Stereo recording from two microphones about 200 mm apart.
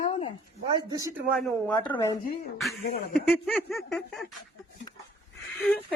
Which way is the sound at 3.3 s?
Centre (ahead or behind).